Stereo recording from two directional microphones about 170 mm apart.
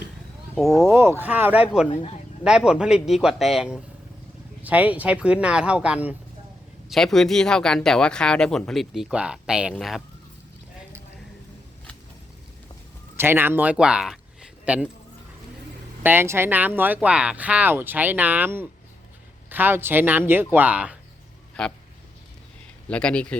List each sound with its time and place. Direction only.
0.7 s speech: 15° right (ahead or behind)
1.9 s a man's voice: 40° left (ahead or behind)
2.4 s speech: 5° right (ahead or behind)
13.1 s speech: 15° right (ahead or behind)
16.0 s speech: 15° right (ahead or behind)
21.6 s speech: 5° left (ahead or behind)
22.9 s speech: 5° left (ahead or behind)